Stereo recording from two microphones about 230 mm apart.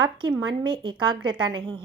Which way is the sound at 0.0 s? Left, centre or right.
Centre.